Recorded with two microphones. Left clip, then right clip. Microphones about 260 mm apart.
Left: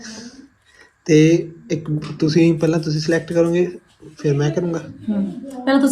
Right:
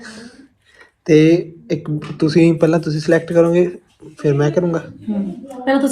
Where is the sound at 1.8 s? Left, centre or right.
Centre.